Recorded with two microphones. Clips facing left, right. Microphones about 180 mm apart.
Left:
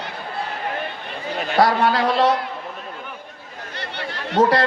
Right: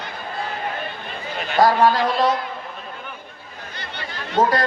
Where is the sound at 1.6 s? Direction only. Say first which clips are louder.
Right 2 dB; 70° left (ahead or behind).